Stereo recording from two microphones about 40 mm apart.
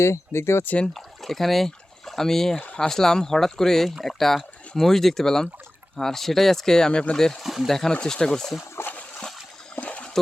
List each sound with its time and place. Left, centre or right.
0.3 s speech: left
0.9 s speech: centre
7.4 s speech: centre
7.7 s speech: centre
8.9 s splash: left
9.8 s water: left